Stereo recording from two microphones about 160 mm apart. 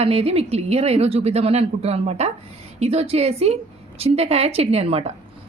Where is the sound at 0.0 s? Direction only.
40° right (ahead or behind).